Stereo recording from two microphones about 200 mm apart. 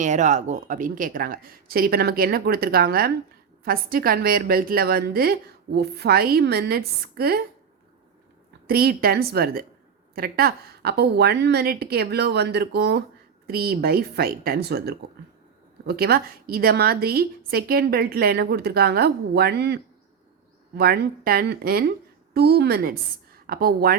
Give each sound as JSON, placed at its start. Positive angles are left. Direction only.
{"t": 0.0, "sound": "a woman's voice", "side_deg": -35}
{"t": 8.6, "sound": "a woman's voice", "side_deg": -50}